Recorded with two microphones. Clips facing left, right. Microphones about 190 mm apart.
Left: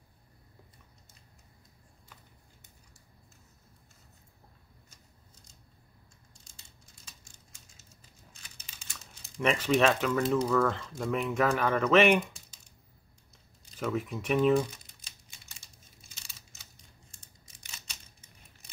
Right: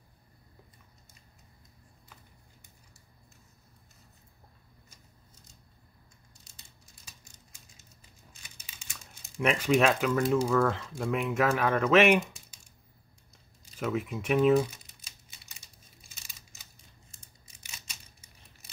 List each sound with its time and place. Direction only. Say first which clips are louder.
8.4 s crumpling: right 1 dB; 5° right (ahead or behind)
10.5 s speech: right 1 dB; 5° right (ahead or behind)
13.7 s crumpling: right 1 dB; 5° right (ahead or behind)
17.1 s scissors: even; 5° right (ahead or behind)